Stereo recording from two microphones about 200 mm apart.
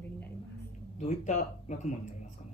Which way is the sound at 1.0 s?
35° left (ahead or behind).